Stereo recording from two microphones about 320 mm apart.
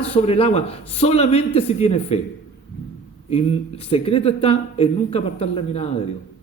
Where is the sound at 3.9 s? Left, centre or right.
Centre.